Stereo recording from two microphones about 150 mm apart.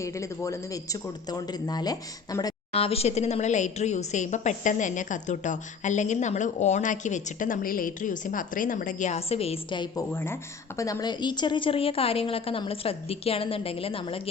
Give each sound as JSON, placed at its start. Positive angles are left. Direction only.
{"t": 0.0, "sound": "speech", "side_deg": 20}
{"t": 2.7, "sound": "a woman's voice", "side_deg": 40}
{"t": 9.9, "sound": "a woman's voice", "side_deg": 15}